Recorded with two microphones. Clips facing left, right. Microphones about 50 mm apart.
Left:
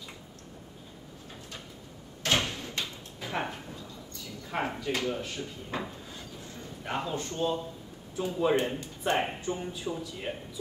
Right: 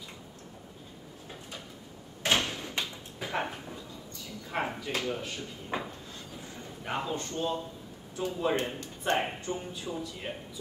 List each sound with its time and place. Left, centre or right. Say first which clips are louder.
2.5 s door: right 1 dB; centre
4.5 s speech: left 1 dB; centre
5.7 s drawer open or close: right 1 dB; centre
6.8 s speech: even; centre